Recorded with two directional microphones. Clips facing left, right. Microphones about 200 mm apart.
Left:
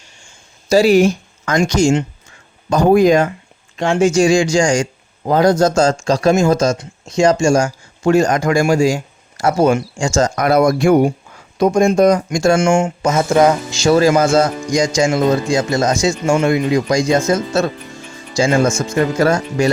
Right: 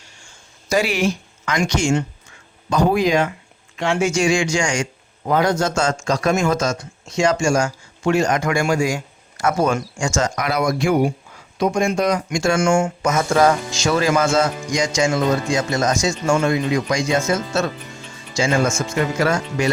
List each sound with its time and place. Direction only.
0.7 s a man's voice: 35° left (ahead or behind)
12.5 s speech: 25° left (ahead or behind)
13.7 s a man's voice: 35° left (ahead or behind)